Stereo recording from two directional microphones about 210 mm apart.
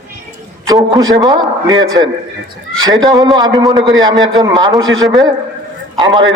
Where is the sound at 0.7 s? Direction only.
20° right (ahead or behind).